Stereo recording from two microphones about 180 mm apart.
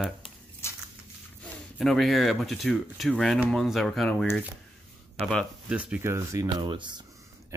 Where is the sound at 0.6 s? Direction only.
15° left (ahead or behind).